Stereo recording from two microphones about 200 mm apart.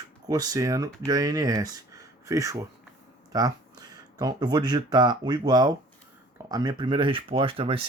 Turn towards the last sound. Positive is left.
turn(degrees=-25)  # may be behind; listen again after turning